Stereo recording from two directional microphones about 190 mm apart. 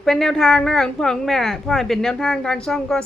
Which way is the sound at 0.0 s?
Centre (ahead or behind).